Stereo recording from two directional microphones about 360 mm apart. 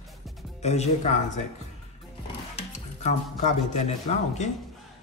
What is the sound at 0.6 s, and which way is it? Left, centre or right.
Speech, centre.